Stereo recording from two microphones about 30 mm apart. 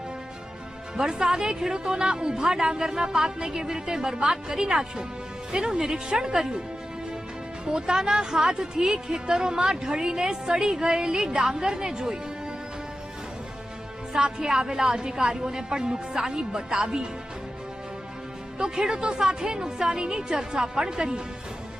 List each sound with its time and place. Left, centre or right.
0.9 s a woman's voice: right
7.6 s a woman's voice: right
14.1 s a woman's voice: right
18.6 s a woman's voice: right